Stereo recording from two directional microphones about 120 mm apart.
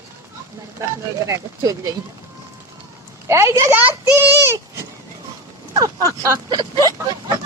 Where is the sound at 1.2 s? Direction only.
25° right (ahead or behind).